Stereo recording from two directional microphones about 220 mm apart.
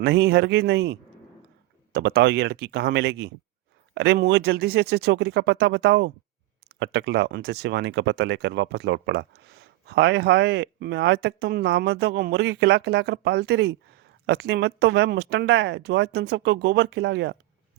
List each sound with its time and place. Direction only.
0.0 s speech: 50° right (ahead or behind)